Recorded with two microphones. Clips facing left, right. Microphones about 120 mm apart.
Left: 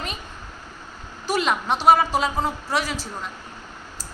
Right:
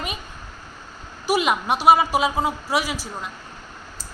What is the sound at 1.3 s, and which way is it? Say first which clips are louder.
A woman's voice: right 2 dB; 10° right (ahead or behind).